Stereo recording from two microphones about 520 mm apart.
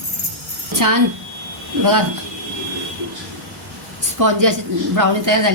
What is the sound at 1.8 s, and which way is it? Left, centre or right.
Speech, right.